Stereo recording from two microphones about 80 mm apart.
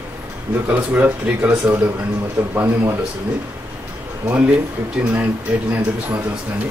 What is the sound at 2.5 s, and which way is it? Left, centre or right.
Speech, right.